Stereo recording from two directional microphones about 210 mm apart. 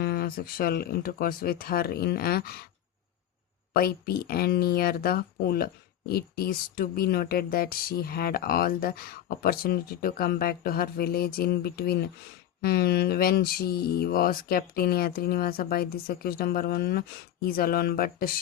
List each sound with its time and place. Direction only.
0.0 s speech: 45° left (ahead or behind)
3.7 s speech: 45° left (ahead or behind)